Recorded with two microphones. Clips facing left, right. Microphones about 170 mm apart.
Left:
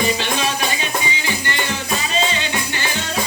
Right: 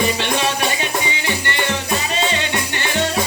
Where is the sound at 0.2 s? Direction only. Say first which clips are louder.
Right 2 dB; 65° right (ahead or behind).